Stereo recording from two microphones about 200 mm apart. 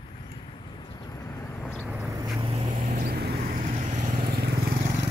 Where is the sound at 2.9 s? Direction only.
50° right (ahead or behind).